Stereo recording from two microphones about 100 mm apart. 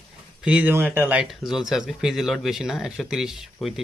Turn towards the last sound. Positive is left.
turn(degrees=-5)  # may be behind; listen again after turning